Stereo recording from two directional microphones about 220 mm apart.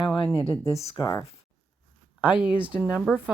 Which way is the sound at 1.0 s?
15° left (ahead or behind).